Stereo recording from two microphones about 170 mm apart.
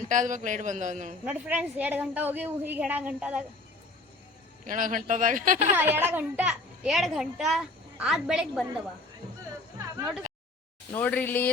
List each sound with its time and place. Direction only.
0.1 s a man's voice: 50° right (ahead or behind)
1.2 s a woman's voice: 10° right (ahead or behind)
4.6 s a man's voice: 50° right (ahead or behind)
5.7 s a child's voice: 10° right (ahead or behind)
10.9 s speech: 10° left (ahead or behind)